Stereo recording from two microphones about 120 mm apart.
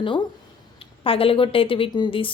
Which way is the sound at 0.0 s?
45° left (ahead or behind).